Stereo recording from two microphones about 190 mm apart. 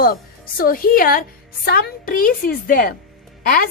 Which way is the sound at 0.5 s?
50° left (ahead or behind).